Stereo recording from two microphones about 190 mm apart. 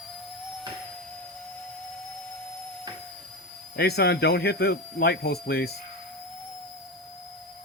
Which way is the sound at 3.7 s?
55° left (ahead or behind).